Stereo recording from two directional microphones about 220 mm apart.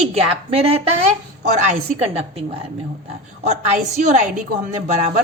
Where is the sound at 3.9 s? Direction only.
30° right (ahead or behind).